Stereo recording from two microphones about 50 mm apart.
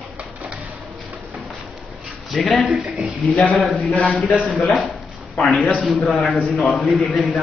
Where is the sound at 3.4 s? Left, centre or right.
Centre.